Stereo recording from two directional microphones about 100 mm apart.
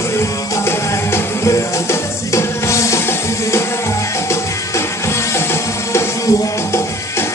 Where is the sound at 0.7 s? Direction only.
25° left (ahead or behind).